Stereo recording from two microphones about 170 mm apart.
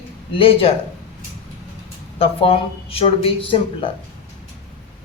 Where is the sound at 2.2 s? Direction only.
35° left (ahead or behind).